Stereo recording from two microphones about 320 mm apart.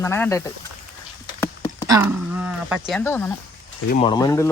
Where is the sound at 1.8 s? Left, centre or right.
Centre.